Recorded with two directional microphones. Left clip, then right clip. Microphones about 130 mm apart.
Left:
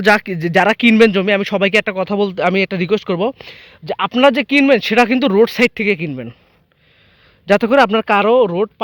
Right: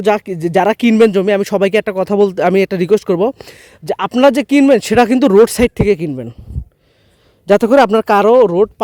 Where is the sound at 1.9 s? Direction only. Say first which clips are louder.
Right 5 dB; 90° right.